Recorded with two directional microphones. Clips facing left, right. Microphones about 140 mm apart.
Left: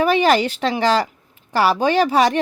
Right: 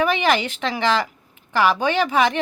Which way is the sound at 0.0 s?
35° left (ahead or behind).